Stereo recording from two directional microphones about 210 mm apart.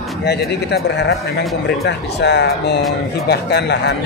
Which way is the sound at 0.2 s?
50° left (ahead or behind).